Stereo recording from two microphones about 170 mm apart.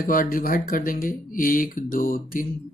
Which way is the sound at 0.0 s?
55° left (ahead or behind).